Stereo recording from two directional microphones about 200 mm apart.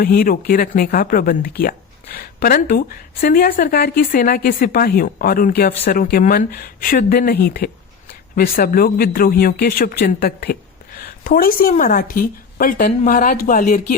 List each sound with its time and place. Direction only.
0.0 s speech: 45° left (ahead or behind)